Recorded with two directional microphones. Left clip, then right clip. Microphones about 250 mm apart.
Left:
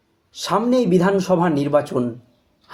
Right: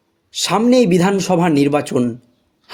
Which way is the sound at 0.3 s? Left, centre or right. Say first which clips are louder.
Right 4 dB; right.